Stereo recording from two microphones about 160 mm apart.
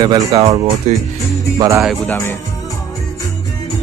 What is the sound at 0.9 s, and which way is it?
Speech, 45° right (ahead or behind).